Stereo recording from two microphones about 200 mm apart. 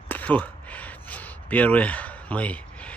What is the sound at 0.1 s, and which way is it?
Speech, 10° left (ahead or behind).